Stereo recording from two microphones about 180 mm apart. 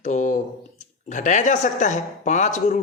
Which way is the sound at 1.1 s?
45° left (ahead or behind).